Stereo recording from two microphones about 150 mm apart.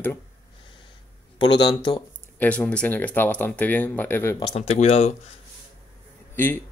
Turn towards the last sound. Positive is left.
turn(degrees=15)  # may be behind; listen again after turning